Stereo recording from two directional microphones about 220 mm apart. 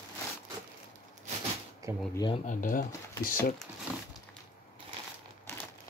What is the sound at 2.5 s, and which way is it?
Speech, 40° left (ahead or behind).